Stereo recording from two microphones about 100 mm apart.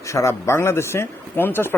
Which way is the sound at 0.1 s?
30° left (ahead or behind).